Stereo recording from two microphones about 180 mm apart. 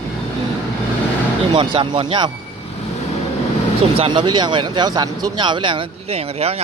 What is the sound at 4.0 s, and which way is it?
Speech, 25° right (ahead or behind).